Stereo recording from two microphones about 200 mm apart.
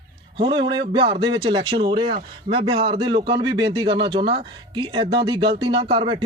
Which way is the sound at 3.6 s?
20° right (ahead or behind).